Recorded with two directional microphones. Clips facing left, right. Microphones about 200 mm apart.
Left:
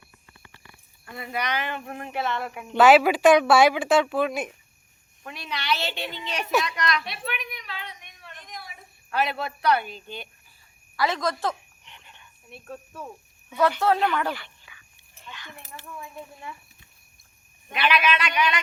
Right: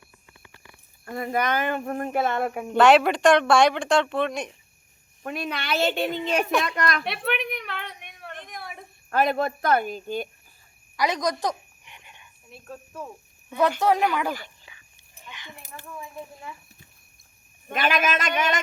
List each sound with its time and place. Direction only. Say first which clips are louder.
1.1 s speech: right 5 dB; 45° right (ahead or behind)
2.7 s speech: left 1 dB; centre (ahead or behind)
5.2 s speech: right 4 dB; 50° right (ahead or behind)
6.6 s a sound: right 1 dB; 50° right (ahead or behind)
10.9 s a sound: right 1 dB; 15° right (ahead or behind)
12.5 s speech: left 1 dB; centre (ahead or behind)
13.6 s speech: right 1 dB; 15° right (ahead or behind)
14.6 s dog: right 2 dB; 25° right (ahead or behind)
15.3 s speech: even; 20° right (ahead or behind)
17.7 s speech: even; 45° right (ahead or behind)